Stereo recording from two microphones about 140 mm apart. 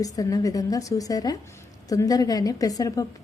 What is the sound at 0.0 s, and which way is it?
A woman's voice, 25° left (ahead or behind).